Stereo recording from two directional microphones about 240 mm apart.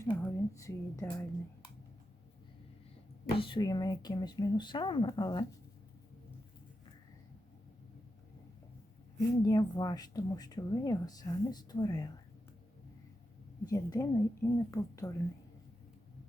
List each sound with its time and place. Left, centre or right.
0.0 s speech: centre
3.3 s speech: left
9.1 s speech: centre
13.7 s speech: centre